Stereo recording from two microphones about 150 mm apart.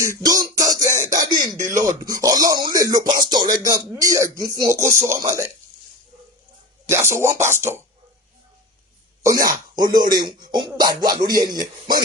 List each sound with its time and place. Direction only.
0.2 s music: 25° right (ahead or behind)
1.1 s a sound: 25° right (ahead or behind)
1.6 s speech: 20° right (ahead or behind)
6.8 s speech: 15° right (ahead or behind)
9.2 s speech: 25° right (ahead or behind)